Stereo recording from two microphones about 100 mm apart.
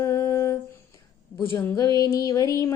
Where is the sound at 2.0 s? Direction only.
35° left (ahead or behind).